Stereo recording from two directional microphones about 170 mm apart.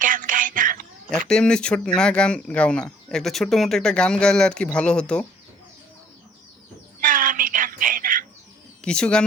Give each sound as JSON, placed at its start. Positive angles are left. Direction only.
{"t": 0.0, "sound": "whispering", "side_deg": -50}
{"t": 1.3, "sound": "speech", "side_deg": 5}
{"t": 7.0, "sound": "a sound", "side_deg": -55}
{"t": 8.8, "sound": "speech", "side_deg": 5}